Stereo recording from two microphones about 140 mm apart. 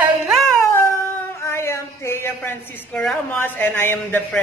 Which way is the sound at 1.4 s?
20° left (ahead or behind).